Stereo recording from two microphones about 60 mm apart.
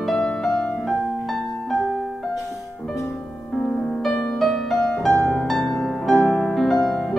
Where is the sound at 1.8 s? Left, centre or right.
Centre.